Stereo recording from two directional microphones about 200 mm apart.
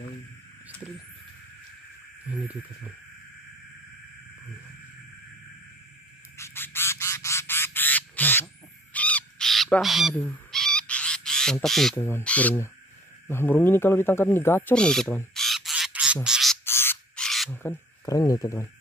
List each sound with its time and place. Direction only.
2.2 s a sound: 5° right (ahead or behind)
6.3 s frog: 10° left (ahead or behind)
8.9 s crow: 5° left (ahead or behind)
12.0 s speech: 10° left (ahead or behind)
16.3 s frog: centre (ahead or behind)
16.6 s frog: 10° left (ahead or behind)